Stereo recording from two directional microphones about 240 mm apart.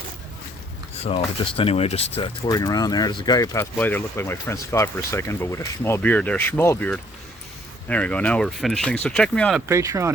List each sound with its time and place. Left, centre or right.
1.0 s speech: left; by 9.6 s centre
9.6 s speech: centre